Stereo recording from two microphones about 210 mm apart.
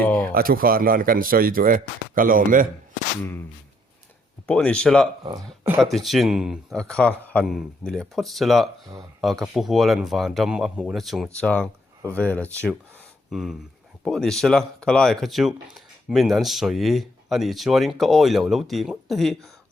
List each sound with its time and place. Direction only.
0.0 s speech: 5° left (ahead or behind)
0.3 s speech: 45° right (ahead or behind)
4.4 s speech: 5° left (ahead or behind)